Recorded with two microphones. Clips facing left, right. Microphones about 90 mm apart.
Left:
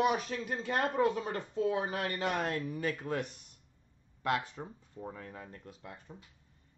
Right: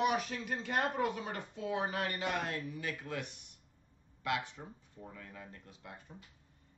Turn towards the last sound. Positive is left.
turn(degrees=40)  # may be behind; listen again after turning